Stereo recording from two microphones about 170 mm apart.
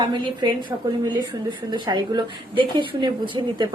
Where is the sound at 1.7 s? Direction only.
25° right (ahead or behind).